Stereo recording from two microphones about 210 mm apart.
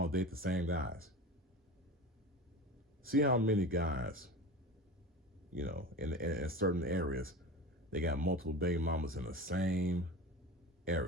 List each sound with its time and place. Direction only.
0.0 s speech: 45° right (ahead or behind)
3.1 s speech: 45° right (ahead or behind)
5.5 s speech: 45° right (ahead or behind)